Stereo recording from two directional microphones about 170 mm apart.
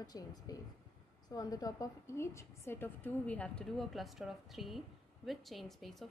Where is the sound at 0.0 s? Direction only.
25° left (ahead or behind).